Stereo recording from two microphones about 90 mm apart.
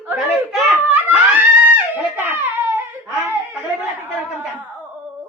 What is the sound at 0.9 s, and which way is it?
Giggle, 20° right (ahead or behind).